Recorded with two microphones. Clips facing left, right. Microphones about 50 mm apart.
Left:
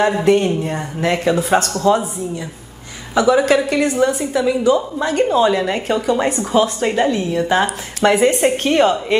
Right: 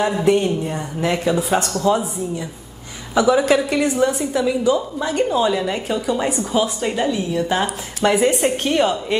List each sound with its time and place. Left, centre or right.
0.2 s a woman's voice: left
3.2 s a woman's voice: left
3.6 s a woman's voice: left